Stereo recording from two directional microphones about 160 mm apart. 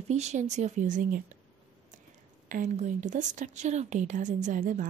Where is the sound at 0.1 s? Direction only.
45° right (ahead or behind).